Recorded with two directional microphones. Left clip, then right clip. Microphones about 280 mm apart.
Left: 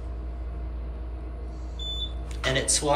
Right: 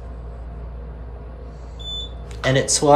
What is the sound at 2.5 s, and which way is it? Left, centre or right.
Speech, right.